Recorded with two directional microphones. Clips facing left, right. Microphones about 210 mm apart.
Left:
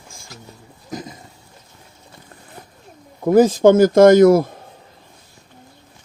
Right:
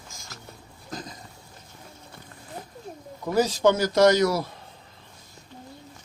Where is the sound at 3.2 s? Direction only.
50° left (ahead or behind).